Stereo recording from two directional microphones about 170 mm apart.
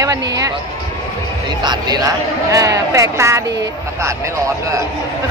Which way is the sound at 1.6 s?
25° right (ahead or behind).